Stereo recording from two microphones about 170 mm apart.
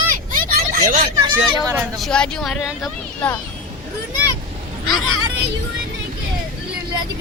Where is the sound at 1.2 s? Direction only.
25° right (ahead or behind).